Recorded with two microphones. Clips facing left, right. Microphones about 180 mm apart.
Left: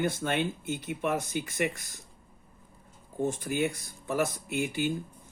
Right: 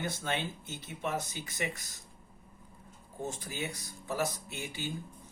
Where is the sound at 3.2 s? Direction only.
55° left (ahead or behind).